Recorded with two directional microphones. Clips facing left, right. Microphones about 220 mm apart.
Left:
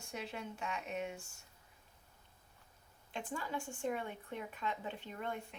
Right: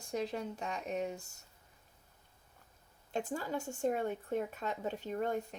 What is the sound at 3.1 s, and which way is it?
Speech, 40° right (ahead or behind).